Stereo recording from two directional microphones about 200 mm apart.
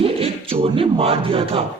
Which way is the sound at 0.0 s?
30° right (ahead or behind).